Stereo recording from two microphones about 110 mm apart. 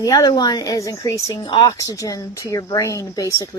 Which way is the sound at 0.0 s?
35° left (ahead or behind).